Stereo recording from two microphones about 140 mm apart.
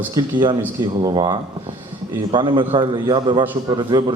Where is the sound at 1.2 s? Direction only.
35° right (ahead or behind).